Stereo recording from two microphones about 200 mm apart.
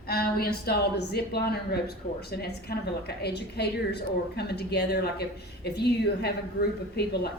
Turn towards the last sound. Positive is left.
turn(degrees=55)  # may be behind; listen again after turning